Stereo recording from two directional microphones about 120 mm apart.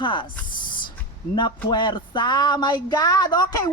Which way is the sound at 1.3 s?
40° left (ahead or behind).